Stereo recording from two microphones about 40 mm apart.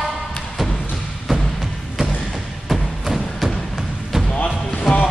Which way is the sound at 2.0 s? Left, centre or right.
Right.